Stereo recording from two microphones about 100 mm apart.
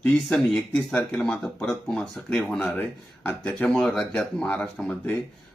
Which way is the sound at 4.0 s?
20° left (ahead or behind).